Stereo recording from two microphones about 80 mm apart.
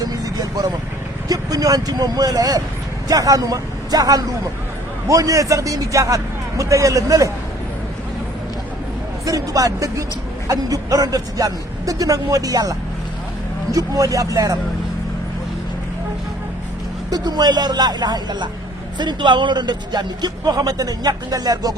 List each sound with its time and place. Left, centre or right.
0.0 s vehicle: right
1.3 s a man's voice: right
9.2 s a man's voice: right
17.1 s speech: right
18.9 s speech: right